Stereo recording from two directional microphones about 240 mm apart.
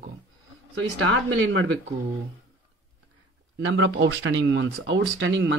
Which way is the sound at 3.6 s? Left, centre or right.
Right.